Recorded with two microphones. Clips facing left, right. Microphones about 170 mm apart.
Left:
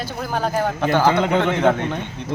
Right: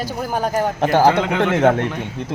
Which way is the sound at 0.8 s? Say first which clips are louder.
Right 3 dB; 35° right (ahead or behind).